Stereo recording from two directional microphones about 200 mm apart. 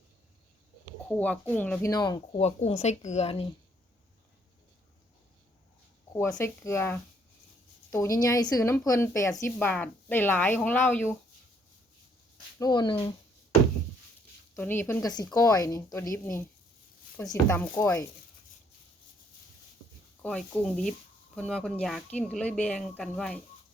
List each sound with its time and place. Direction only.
1.0 s a woman's voice: 5° left (ahead or behind)
1.9 s speech: 20° left (ahead or behind)
6.1 s a woman's voice: 10° left (ahead or behind)
12.5 s speech: 20° left (ahead or behind)
14.5 s a woman's voice: 10° left (ahead or behind)
20.2 s speech: 5° left (ahead or behind)